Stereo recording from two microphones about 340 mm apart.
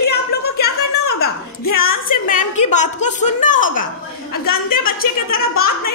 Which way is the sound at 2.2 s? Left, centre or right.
Left.